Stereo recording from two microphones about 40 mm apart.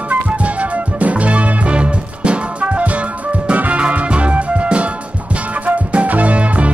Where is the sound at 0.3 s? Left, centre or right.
Right.